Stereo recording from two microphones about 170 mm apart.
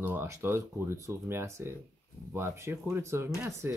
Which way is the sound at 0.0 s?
15° right (ahead or behind).